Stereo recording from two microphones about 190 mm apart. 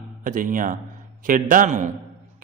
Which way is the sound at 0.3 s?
45° right (ahead or behind).